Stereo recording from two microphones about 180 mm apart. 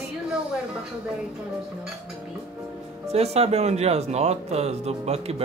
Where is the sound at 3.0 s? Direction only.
35° right (ahead or behind).